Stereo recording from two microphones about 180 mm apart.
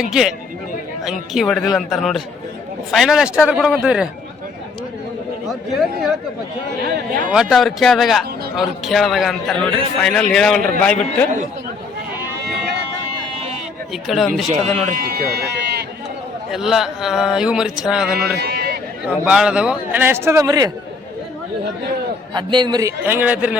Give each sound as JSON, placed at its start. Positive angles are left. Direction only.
{"t": 0.1, "sound": "speech", "side_deg": 0}
{"t": 5.5, "sound": "speech", "side_deg": 0}
{"t": 6.9, "sound": "speech", "side_deg": -50}
{"t": 7.3, "sound": "speech", "side_deg": 0}
{"t": 13.9, "sound": "speech", "side_deg": 0}
{"t": 14.9, "sound": "speech", "side_deg": -55}
{"t": 16.5, "sound": "speech", "side_deg": 0}
{"t": 18.3, "sound": "run", "side_deg": -60}
{"t": 19.0, "sound": "a man's voice", "side_deg": -5}
{"t": 22.4, "sound": "a man's voice", "side_deg": -25}